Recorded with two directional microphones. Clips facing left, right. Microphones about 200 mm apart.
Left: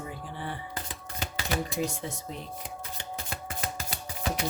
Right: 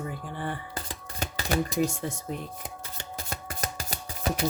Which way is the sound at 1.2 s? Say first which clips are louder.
Right 4 dB; 45° right (ahead or behind).